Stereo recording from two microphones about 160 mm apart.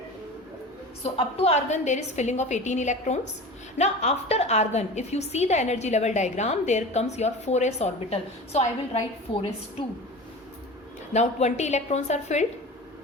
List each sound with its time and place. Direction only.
1.0 s a woman's voice: 40° left (ahead or behind)
11.1 s a woman's voice: 45° left (ahead or behind)